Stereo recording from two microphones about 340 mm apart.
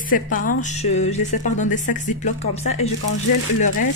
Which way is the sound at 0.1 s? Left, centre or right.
Left.